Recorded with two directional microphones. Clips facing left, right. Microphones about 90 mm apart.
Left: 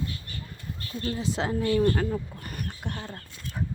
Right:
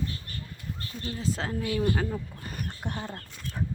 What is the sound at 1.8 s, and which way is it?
Speech, 5° right (ahead or behind).